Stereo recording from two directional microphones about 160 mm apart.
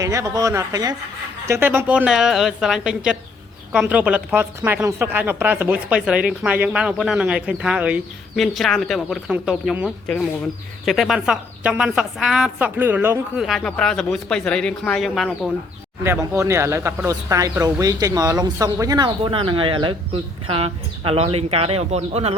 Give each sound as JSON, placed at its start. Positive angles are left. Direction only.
{"t": 0.0, "sound": "a woman's voice", "side_deg": -20}
{"t": 13.4, "sound": "a woman's voice", "side_deg": 0}
{"t": 16.3, "sound": "speech", "side_deg": -15}